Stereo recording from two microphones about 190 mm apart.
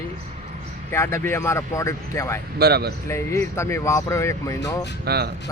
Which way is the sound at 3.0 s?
15° left (ahead or behind).